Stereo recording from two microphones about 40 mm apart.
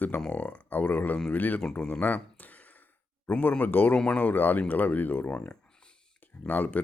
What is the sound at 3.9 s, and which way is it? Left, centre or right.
Speech, left.